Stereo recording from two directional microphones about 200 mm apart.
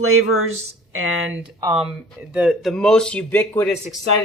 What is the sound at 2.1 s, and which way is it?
Speech, 5° right (ahead or behind).